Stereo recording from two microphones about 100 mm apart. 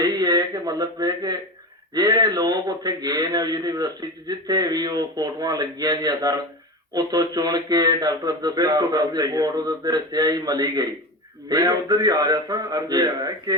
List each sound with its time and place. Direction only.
0.0 s a man's voice: 45° right (ahead or behind)